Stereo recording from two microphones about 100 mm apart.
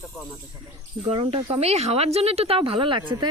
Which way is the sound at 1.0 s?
70° right (ahead or behind).